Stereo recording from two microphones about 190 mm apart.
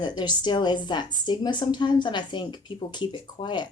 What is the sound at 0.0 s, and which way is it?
Speech, 25° left (ahead or behind).